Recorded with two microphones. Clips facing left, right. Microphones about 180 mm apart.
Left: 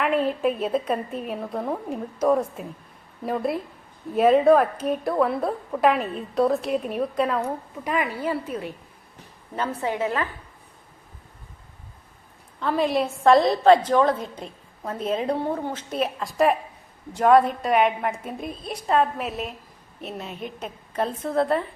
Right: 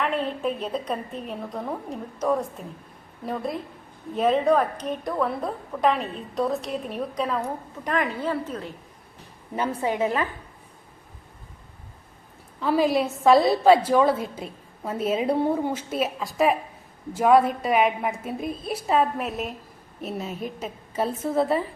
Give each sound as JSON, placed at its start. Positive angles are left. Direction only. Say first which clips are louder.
{"t": 0.0, "sound": "a woman's voice", "louder": "left 4 dB", "side_deg": 5}
{"t": 9.6, "sound": "a woman's voice", "louder": "right 1 dB", "side_deg": -15}
{"t": 12.5, "sound": "a woman's voice", "louder": "right 1 dB", "side_deg": -5}